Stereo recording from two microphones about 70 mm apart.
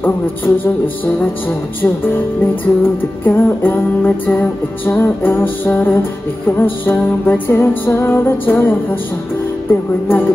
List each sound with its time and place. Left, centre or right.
1.8 s music: left